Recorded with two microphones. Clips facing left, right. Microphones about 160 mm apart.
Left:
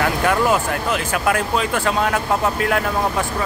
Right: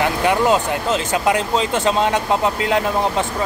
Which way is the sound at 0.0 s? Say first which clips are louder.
Right 1 dB; 20° right (ahead or behind).